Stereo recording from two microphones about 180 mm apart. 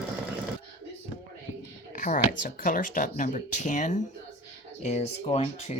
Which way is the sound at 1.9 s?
45° left (ahead or behind).